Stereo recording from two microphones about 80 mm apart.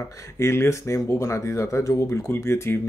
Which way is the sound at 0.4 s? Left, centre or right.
Left.